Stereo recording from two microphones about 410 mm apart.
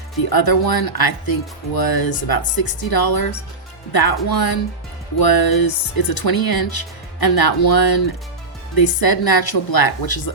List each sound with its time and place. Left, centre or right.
0.3 s speech: left